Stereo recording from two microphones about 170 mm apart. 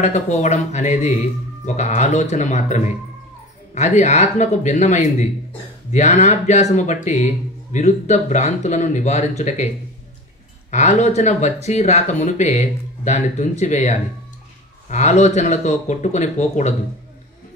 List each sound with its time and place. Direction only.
0.0 s speech: 45° left (ahead or behind)
10.7 s speech: 45° left (ahead or behind)